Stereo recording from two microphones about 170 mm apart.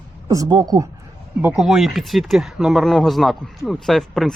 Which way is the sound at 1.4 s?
5° right (ahead or behind).